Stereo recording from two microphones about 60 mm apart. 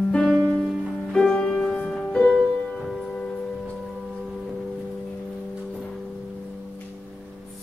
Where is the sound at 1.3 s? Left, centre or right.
Centre.